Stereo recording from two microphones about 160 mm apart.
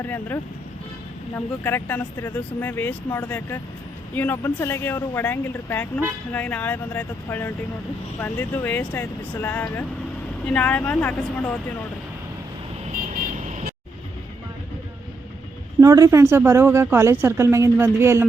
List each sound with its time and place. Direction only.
0.0 s speech: 10° left (ahead or behind)
13.1 s vehicle: 50° right (ahead or behind)
15.8 s speech: 20° right (ahead or behind)